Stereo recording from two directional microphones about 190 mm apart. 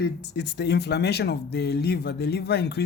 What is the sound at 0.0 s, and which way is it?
Speech, 60° left (ahead or behind).